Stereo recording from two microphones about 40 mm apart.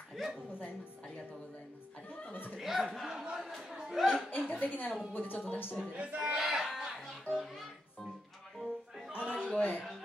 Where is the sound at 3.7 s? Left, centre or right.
Centre.